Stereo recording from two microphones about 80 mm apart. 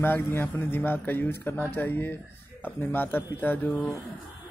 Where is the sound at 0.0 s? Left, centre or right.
Left.